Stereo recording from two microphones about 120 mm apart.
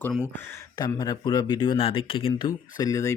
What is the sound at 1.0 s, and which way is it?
Speech, 35° left (ahead or behind).